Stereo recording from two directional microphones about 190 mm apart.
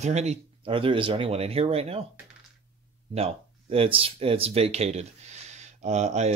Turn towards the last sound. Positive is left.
turn(degrees=-35)  # may be behind; listen again after turning